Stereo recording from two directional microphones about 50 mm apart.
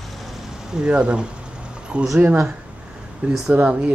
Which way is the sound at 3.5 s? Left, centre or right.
Right.